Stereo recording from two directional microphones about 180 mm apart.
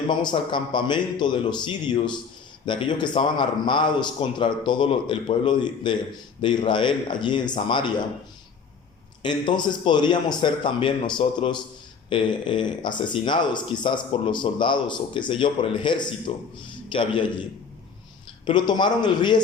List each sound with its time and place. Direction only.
0.1 s speech: 25° left (ahead or behind)
9.2 s speech: 25° left (ahead or behind)
18.4 s speech: 25° left (ahead or behind)